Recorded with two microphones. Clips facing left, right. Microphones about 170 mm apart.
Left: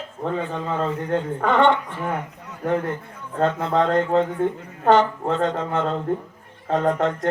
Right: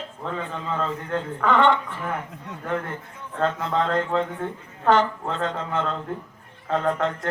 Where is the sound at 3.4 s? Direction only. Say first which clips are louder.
Left 4 dB; 50° left (ahead or behind).